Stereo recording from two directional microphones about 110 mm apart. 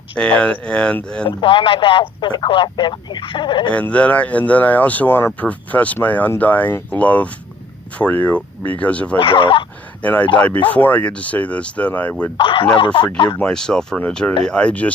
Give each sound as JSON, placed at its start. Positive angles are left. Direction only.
{"t": 0.2, "sound": "speech", "side_deg": 10}
{"t": 1.4, "sound": "speech", "side_deg": 50}
{"t": 3.7, "sound": "speech", "side_deg": 10}
{"t": 9.1, "sound": "speech", "side_deg": 50}
{"t": 10.0, "sound": "speech", "side_deg": 15}
{"t": 12.4, "sound": "speech", "side_deg": 50}
{"t": 13.4, "sound": "speech", "side_deg": 5}